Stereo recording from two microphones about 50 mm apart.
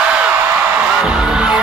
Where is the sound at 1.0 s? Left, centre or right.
Centre.